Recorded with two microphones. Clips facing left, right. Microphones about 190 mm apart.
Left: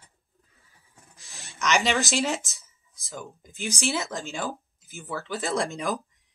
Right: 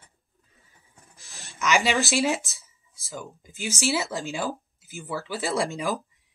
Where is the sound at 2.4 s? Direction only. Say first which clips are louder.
Right 2 dB; 15° left (ahead or behind).